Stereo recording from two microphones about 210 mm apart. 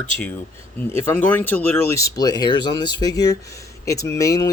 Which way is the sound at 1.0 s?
10° left (ahead or behind).